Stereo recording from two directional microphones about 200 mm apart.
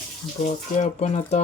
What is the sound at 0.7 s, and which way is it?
Speech, 35° left (ahead or behind).